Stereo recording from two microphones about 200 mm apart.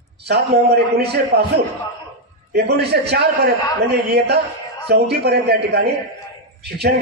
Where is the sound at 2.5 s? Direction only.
55° right (ahead or behind).